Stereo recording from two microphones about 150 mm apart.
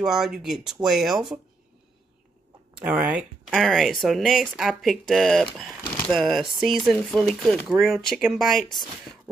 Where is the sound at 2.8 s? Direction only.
5° right (ahead or behind).